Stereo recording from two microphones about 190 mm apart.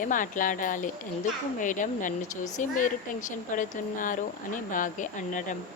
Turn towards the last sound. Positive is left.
turn(degrees=40)  # may be behind; listen again after turning